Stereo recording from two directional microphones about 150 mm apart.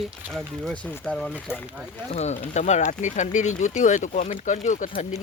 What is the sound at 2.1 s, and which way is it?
Speech, 45° left (ahead or behind).